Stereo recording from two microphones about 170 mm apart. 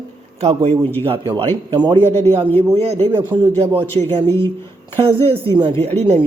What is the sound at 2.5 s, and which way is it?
Speech, 40° right (ahead or behind).